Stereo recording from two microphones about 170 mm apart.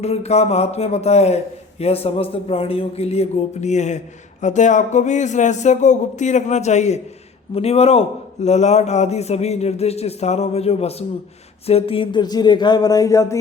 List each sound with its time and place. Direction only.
0.0 s a man's voice: 40° left (ahead or behind); by 13.4 s 20° left (ahead or behind)